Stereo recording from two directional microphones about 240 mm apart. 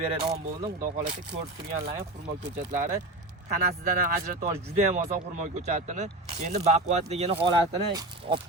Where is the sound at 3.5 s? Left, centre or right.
Right.